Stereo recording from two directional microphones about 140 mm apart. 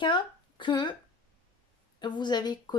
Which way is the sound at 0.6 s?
35° left (ahead or behind).